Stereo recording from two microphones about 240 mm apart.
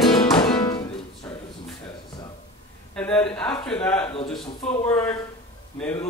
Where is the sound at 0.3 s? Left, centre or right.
Centre.